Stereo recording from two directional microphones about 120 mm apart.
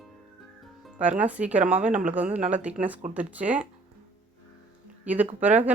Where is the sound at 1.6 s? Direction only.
85° right.